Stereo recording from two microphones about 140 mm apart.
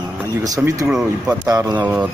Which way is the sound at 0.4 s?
25° right (ahead or behind).